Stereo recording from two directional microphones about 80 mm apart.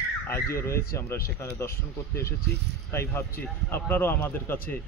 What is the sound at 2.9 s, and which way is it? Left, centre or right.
Speech, left.